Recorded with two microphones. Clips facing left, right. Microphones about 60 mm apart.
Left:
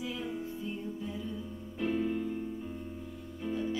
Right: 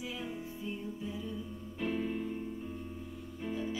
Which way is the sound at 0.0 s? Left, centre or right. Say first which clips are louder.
Left 3 dB; centre.